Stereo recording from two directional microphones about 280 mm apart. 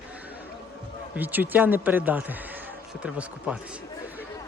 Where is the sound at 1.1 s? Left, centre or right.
Centre.